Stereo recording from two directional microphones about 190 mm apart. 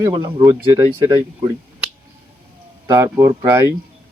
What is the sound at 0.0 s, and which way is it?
Speech, 20° right (ahead or behind).